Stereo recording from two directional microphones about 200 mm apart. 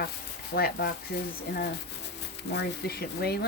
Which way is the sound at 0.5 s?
50° left (ahead or behind).